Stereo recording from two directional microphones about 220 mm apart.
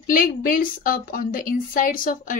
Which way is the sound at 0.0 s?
40° left (ahead or behind).